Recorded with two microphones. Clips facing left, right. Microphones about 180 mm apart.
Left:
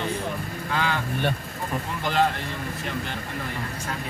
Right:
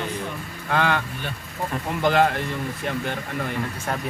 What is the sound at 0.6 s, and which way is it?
Speech, 60° right (ahead or behind).